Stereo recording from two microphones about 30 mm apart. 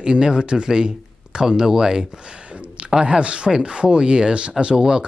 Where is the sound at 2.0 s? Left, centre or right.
Right.